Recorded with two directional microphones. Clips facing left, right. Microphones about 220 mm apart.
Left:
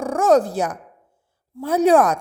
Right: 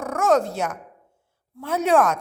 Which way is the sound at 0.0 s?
30° left (ahead or behind).